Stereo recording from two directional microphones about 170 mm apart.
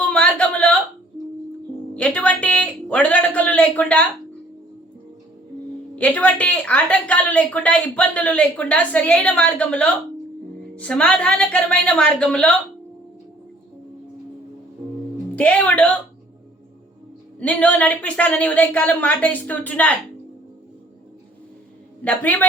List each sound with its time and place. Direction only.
0.1 s a sound: 5° left (ahead or behind)
2.0 s speech: 5° left (ahead or behind)
6.0 s a woman's voice: 10° left (ahead or behind)
15.4 s a woman's voice: 5° left (ahead or behind)
17.4 s a woman's voice: 5° left (ahead or behind)
22.0 s a woman's voice: 10° left (ahead or behind)